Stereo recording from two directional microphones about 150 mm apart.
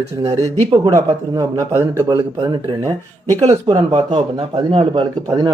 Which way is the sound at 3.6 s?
35° right (ahead or behind).